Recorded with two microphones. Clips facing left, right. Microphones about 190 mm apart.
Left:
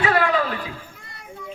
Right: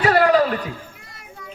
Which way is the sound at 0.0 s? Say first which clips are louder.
Right 5 dB; 40° right (ahead or behind).